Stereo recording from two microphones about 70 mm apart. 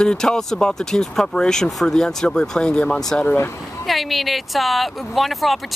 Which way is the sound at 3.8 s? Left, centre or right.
Centre.